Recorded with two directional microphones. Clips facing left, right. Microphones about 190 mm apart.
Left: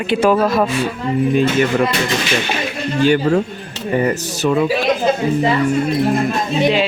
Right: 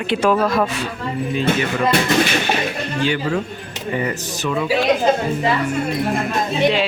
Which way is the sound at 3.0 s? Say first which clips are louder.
Left 7 dB; 45° left (ahead or behind).